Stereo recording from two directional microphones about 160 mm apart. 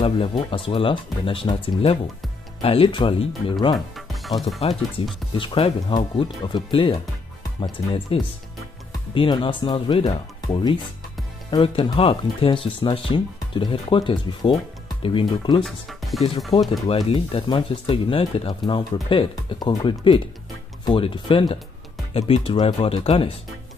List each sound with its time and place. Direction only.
0.0 s speech: 35° left (ahead or behind)
3.7 s speech: centre (ahead or behind)
4.6 s speech: 40° left (ahead or behind)
15.6 s speech: centre (ahead or behind)
16.5 s speech: 35° left (ahead or behind)